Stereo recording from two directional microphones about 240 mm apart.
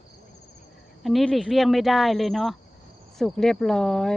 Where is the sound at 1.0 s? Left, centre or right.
Centre.